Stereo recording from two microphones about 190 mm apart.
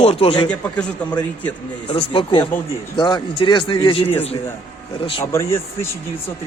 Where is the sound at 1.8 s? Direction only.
25° left (ahead or behind).